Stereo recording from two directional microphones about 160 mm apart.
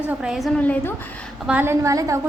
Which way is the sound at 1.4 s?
10° right (ahead or behind).